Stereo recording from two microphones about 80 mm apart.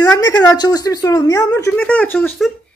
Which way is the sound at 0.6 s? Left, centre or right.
Left.